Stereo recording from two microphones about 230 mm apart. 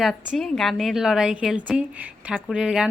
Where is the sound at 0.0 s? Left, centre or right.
Centre.